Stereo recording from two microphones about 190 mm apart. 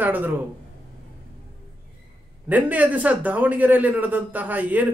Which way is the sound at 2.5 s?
10° right (ahead or behind).